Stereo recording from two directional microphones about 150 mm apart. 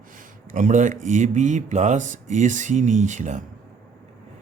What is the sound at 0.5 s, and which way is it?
Speech, 60° right (ahead or behind).